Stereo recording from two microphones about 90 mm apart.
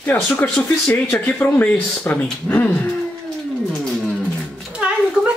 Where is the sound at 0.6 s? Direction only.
10° left (ahead or behind).